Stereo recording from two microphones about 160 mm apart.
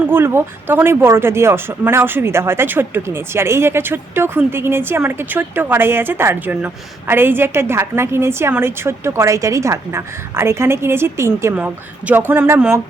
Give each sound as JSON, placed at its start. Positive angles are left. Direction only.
{"t": 0.1, "sound": "speech", "side_deg": -15}